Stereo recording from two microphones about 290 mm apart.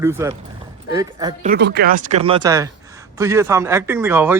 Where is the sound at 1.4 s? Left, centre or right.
Right; by 4.3 s centre.